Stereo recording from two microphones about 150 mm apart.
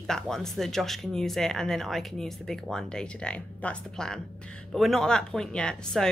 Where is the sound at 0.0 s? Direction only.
5° left (ahead or behind).